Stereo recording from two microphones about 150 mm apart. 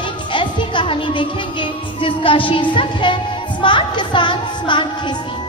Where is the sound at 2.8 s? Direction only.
30° left (ahead or behind).